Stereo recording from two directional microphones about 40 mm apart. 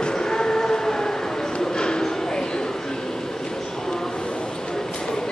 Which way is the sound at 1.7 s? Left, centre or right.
Centre.